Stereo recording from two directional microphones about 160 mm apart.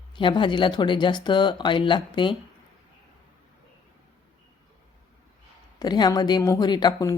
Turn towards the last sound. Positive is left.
turn(degrees=25)  # may be behind; listen again after turning